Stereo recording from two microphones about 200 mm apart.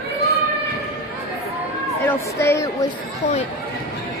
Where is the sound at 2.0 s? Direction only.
10° left (ahead or behind).